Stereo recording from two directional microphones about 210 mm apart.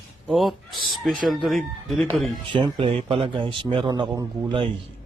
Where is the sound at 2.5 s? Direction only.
25° right (ahead or behind).